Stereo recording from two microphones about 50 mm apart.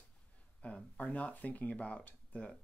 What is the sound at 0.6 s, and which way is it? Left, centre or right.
Speech, left.